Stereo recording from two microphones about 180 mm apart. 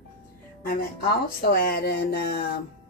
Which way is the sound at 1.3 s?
60° left (ahead or behind).